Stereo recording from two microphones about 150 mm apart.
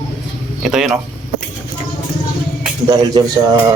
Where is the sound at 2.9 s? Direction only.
25° right (ahead or behind).